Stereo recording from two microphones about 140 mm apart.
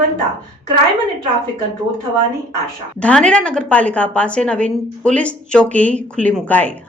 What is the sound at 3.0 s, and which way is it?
Speech, 10° left (ahead or behind).